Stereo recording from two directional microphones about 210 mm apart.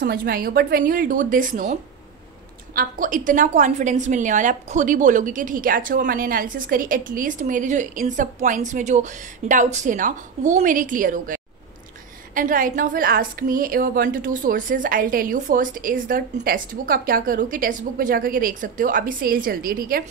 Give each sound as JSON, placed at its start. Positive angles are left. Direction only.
{"t": 0.0, "sound": "a woman's voice", "side_deg": -45}